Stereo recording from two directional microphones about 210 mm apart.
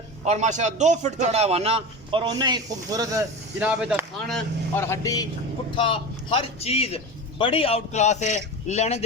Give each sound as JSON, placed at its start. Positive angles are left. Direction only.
{"t": 0.3, "sound": "a man's voice", "side_deg": -35}
{"t": 3.6, "sound": "a man's voice", "side_deg": -5}